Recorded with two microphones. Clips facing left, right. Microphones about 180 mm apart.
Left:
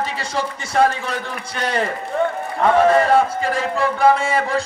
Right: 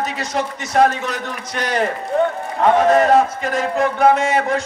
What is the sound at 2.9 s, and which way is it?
A man's voice, 30° left (ahead or behind).